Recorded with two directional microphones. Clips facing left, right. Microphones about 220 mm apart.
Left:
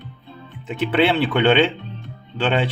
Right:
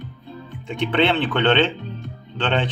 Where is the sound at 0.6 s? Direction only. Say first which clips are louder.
Left 1 dB; 5° left (ahead or behind).